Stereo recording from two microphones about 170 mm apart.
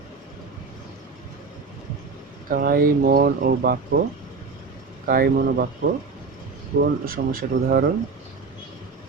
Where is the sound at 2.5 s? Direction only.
55° right (ahead or behind).